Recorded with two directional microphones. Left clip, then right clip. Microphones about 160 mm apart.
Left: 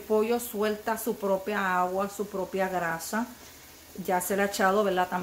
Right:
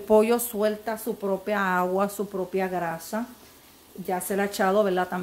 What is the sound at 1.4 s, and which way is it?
Speech, 30° right (ahead or behind).